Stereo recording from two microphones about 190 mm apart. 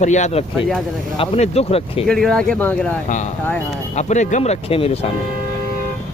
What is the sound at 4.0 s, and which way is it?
Speech, 40° left (ahead or behind).